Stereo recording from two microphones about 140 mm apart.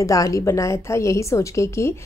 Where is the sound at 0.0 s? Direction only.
25° left (ahead or behind).